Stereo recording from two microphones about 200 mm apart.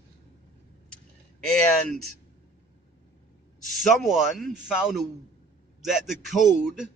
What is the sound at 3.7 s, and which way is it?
Speech, centre (ahead or behind).